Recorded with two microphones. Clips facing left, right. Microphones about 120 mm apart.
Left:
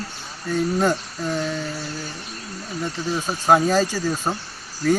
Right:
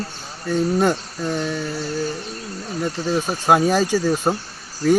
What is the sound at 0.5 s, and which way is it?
Speech, 20° right (ahead or behind).